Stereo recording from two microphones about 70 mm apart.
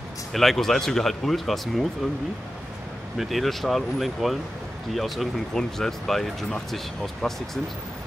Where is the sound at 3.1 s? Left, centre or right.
Centre.